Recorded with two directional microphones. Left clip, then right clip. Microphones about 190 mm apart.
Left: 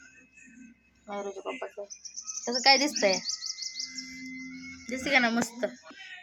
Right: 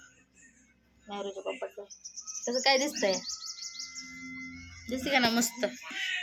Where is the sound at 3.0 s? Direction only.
30° left (ahead or behind).